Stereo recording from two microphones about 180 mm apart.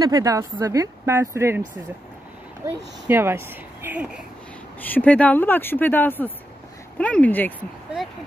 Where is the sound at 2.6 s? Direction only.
15° right (ahead or behind).